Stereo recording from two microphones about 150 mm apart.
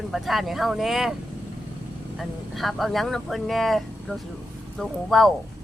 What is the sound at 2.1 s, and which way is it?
Speech, centre (ahead or behind).